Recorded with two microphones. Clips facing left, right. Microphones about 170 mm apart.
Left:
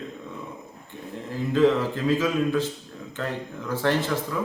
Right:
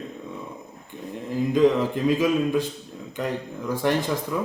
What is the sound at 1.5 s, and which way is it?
Speech, 15° right (ahead or behind).